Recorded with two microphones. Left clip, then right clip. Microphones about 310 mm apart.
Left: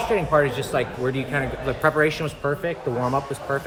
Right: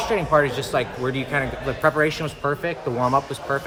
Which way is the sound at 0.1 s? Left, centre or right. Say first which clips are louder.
Right 1 dB; centre.